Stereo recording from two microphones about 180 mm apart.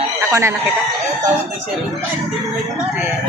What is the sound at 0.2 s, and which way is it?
Chicken, 15° right (ahead or behind).